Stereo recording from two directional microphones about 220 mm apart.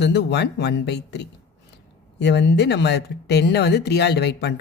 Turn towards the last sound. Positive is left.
turn(degrees=50)  # may be behind; listen again after turning